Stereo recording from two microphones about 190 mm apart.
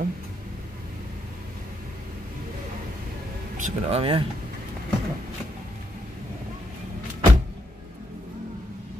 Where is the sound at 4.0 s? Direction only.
30° right (ahead or behind).